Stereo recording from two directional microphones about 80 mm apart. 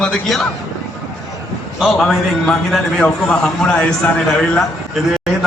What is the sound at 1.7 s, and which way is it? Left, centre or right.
A man's voice, centre.